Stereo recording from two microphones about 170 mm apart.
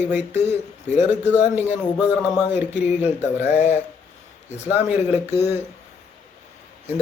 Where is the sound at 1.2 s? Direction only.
40° left (ahead or behind).